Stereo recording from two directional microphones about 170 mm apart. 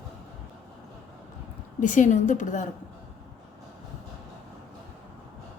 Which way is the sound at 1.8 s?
45° left (ahead or behind).